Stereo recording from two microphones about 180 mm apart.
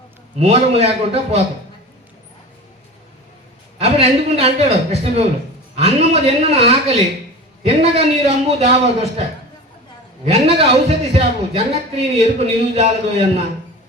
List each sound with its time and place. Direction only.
0.3 s speech: 35° right (ahead or behind)
3.8 s speech: 35° right (ahead or behind)
10.3 s speech: 35° right (ahead or behind)